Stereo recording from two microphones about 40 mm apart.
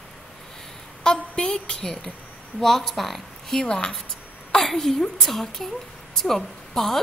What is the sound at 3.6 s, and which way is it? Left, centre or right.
Speech, left.